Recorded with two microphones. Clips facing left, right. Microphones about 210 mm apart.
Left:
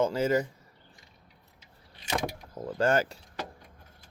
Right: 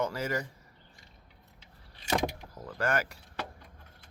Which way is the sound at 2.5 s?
25° left (ahead or behind).